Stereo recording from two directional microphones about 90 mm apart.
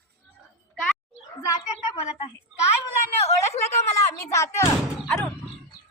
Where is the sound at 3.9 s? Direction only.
30° left (ahead or behind).